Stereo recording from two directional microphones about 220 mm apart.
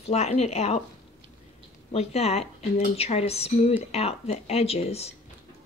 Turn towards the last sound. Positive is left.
turn(degrees=30)  # may be behind; listen again after turning